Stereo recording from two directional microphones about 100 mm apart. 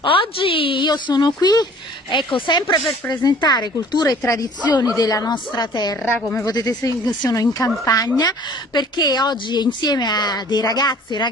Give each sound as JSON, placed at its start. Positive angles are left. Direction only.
{"t": 0.0, "sound": "a woman's voice", "side_deg": 60}
{"t": 6.0, "sound": "speech", "side_deg": 20}
{"t": 6.4, "sound": "speech", "side_deg": 40}